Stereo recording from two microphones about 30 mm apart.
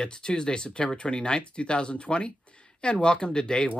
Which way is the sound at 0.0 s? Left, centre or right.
Left.